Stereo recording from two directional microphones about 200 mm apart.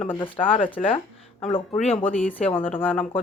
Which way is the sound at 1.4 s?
30° left (ahead or behind).